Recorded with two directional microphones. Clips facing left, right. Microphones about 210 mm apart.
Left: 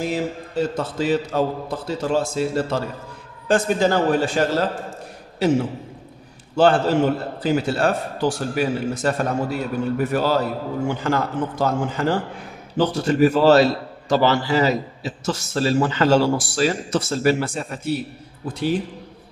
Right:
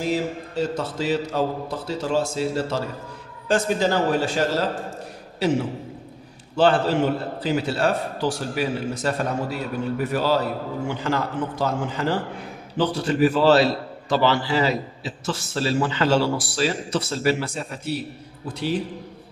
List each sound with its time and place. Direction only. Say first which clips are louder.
0.6 s a man's voice: left 3 dB; 55° left (ahead or behind)